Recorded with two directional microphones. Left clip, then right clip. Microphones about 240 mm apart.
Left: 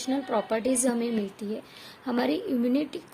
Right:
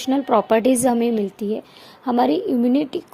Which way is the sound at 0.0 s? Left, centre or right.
Right.